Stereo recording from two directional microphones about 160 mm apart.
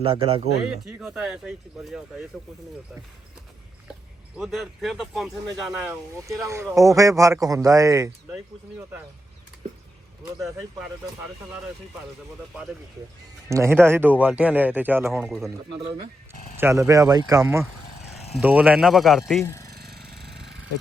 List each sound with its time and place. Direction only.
0.0 s speech: 35° right (ahead or behind)
0.9 s speech: 5° right (ahead or behind)
4.4 s speech: centre (ahead or behind)
5.8 s speech: 15° right (ahead or behind)
13.5 s speech: 15° right (ahead or behind)
15.3 s speech: centre (ahead or behind)
16.6 s speech: 15° right (ahead or behind); by 19.2 s centre (ahead or behind)
19.4 s speech: 15° left (ahead or behind)
19.7 s a sound: 80° right